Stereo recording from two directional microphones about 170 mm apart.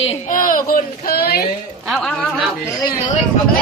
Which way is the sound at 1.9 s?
5° left (ahead or behind).